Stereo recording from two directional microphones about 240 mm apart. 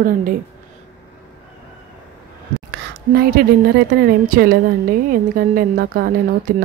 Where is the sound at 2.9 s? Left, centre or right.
Right.